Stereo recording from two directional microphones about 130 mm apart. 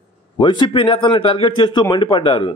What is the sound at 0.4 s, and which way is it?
A man's voice, 40° left (ahead or behind).